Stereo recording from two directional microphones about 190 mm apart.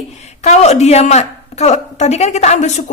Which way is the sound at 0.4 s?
35° left (ahead or behind).